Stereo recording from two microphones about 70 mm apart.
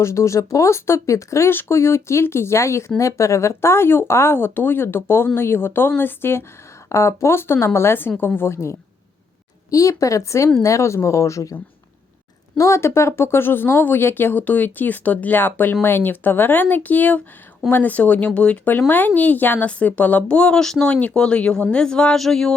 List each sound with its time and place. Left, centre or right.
0.0 s speech: left
1.5 s speech: left
6.9 s speech: left
9.6 s speech: left
12.5 s speech: left; by 22.5 s centre